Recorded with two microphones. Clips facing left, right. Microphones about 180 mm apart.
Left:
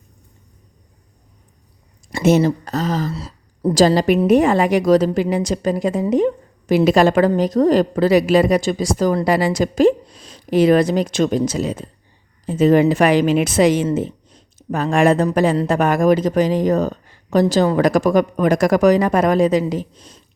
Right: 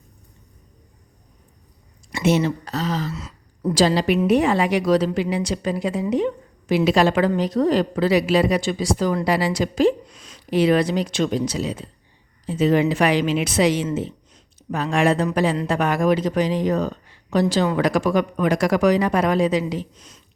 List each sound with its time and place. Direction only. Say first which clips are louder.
2.1 s a woman's voice: left 5 dB; 40° left (ahead or behind)
10.1 s a woman's voice: left 4 dB; 35° left (ahead or behind)
19.9 s speech: left 4 dB; 35° left (ahead or behind)